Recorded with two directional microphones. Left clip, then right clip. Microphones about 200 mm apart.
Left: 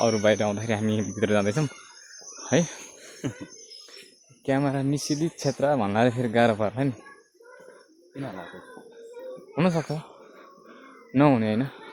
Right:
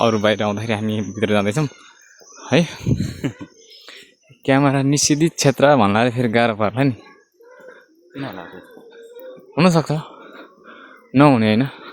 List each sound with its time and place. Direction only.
0.0 s speech: 25° right (ahead or behind)
3.2 s cough: 65° right (ahead or behind)
4.4 s speech: 35° right (ahead or behind)
9.6 s speech: 35° right (ahead or behind)
11.1 s speech: 35° right (ahead or behind)